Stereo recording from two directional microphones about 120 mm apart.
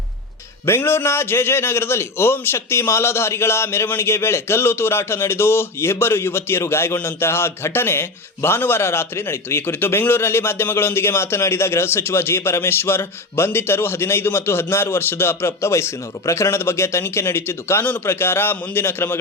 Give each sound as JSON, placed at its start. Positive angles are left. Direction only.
{"t": 0.6, "sound": "a man's voice", "side_deg": 20}